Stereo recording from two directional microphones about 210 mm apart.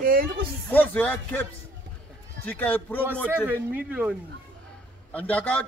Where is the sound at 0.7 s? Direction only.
10° left (ahead or behind).